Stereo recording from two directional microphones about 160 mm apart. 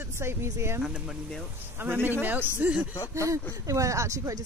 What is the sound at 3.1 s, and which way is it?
Speech, 20° right (ahead or behind).